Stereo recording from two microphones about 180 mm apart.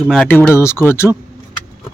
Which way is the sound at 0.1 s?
5° left (ahead or behind).